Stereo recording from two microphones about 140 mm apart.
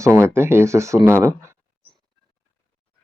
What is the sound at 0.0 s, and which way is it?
Speech, 15° right (ahead or behind).